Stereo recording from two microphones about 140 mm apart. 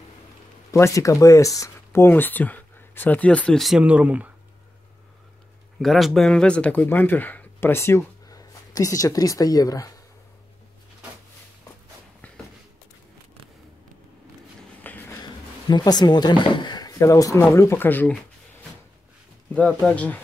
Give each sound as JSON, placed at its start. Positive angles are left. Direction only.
{"t": 0.7, "sound": "speech", "side_deg": 20}
{"t": 3.8, "sound": "speech", "side_deg": -10}
{"t": 5.8, "sound": "speech", "side_deg": 0}
{"t": 14.8, "sound": "a sound", "side_deg": 15}
{"t": 15.7, "sound": "speech", "side_deg": 30}
{"t": 19.5, "sound": "speech", "side_deg": 10}